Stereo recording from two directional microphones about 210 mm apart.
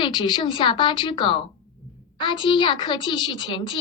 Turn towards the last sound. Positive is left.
turn(degrees=20)  # may be behind; listen again after turning